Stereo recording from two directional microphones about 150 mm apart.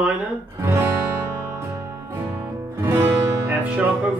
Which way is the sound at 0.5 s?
15° right (ahead or behind).